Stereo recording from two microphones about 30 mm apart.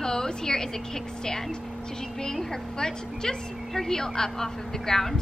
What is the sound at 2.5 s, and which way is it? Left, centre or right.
A woman's voice, left.